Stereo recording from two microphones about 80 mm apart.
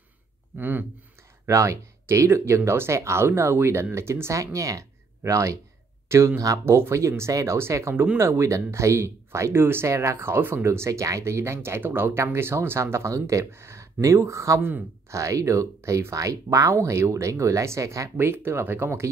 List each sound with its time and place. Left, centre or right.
0.6 s speech: right
1.5 s speech: right
18.1 s speech: right